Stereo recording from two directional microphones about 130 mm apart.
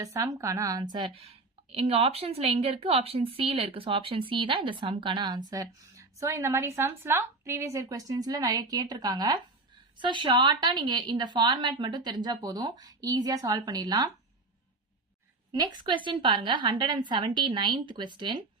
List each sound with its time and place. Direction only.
0.0 s a woman's voice: 25° right (ahead or behind)
15.5 s a woman's voice: 35° right (ahead or behind)